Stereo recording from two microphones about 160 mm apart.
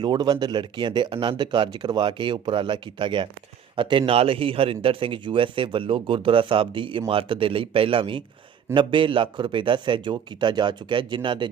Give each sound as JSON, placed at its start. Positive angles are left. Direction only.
{"t": 0.0, "sound": "a man's voice", "side_deg": -25}